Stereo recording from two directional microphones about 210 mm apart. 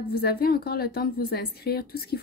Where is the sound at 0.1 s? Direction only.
45° left (ahead or behind).